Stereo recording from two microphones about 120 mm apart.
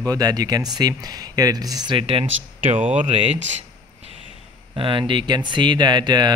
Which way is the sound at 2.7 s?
90° right.